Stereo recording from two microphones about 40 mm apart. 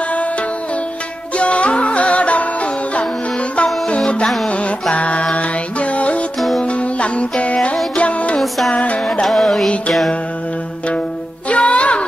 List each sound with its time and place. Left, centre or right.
1.3 s music: left
4.5 s music: left
8.4 s music: centre
8.7 s music: left
9.2 s music: centre
11.4 s music: left